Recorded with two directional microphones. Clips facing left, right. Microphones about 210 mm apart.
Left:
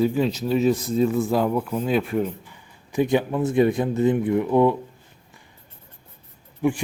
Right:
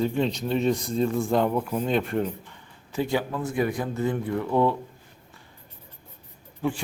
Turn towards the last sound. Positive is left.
turn(degrees=15)  # may be behind; listen again after turning